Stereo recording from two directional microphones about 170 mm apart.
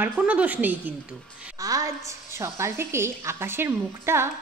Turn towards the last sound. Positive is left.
turn(degrees=-15)  # may be behind; listen again after turning